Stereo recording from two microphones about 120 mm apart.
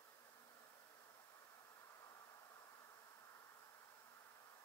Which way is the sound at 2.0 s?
30° left (ahead or behind).